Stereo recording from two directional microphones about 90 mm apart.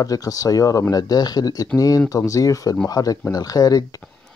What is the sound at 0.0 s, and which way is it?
Speech, 40° left (ahead or behind).